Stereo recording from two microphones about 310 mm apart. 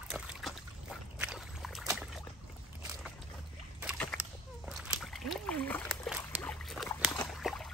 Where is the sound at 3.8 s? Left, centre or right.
Centre.